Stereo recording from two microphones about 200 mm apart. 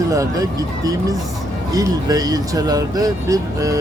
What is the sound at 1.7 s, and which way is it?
Speech, 20° right (ahead or behind).